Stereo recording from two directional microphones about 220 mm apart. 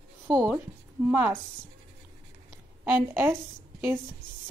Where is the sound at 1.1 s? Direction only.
10° right (ahead or behind).